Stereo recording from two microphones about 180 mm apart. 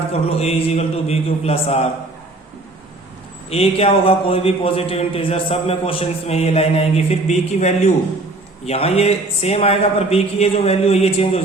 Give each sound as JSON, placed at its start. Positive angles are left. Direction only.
{"t": 0.1, "sound": "a man's voice", "side_deg": 35}
{"t": 3.5, "sound": "a man's voice", "side_deg": 35}